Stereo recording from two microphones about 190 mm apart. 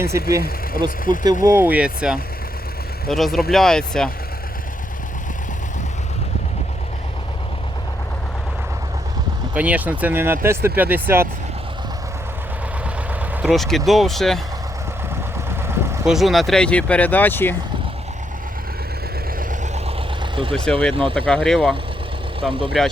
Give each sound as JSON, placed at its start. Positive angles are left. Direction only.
{"t": 0.1, "sound": "speech", "side_deg": -15}
{"t": 0.9, "sound": "speech", "side_deg": 45}
{"t": 1.2, "sound": "speech", "side_deg": -20}
{"t": 9.6, "sound": "speech", "side_deg": -10}
{"t": 13.3, "sound": "speech", "side_deg": 0}
{"t": 15.6, "sound": "vehicle", "side_deg": -15}
{"t": 16.0, "sound": "speech", "side_deg": 0}
{"t": 19.4, "sound": "vehicle", "side_deg": -45}
{"t": 20.3, "sound": "speech", "side_deg": -30}
{"t": 20.7, "sound": "speech", "side_deg": 5}
{"t": 22.4, "sound": "speech", "side_deg": -25}